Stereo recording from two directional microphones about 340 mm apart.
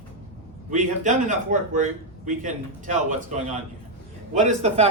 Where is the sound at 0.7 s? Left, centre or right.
Right.